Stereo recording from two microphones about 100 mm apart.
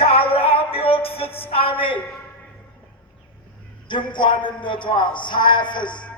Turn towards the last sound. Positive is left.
turn(degrees=50)  # may be behind; listen again after turning